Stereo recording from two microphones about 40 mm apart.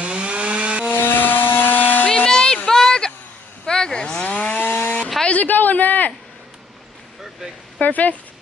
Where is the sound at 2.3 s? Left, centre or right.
Centre.